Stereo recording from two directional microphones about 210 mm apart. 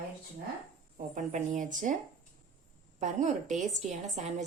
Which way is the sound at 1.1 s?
35° right (ahead or behind).